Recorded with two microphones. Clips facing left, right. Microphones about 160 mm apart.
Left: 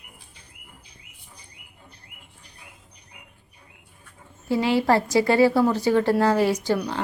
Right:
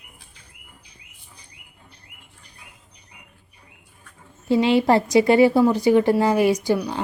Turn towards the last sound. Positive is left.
turn(degrees=-15)  # may be behind; listen again after turning